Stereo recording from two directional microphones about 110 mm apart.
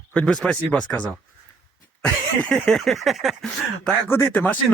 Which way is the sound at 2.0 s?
10° left (ahead or behind).